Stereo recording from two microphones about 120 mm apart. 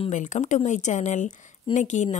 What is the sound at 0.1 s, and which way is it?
A woman's voice, 90° left.